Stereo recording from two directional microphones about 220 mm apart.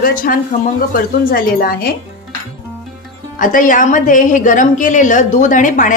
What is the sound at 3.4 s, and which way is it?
A woman's voice, 35° left (ahead or behind).